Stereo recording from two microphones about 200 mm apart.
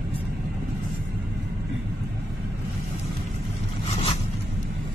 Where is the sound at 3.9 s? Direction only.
30° left (ahead or behind).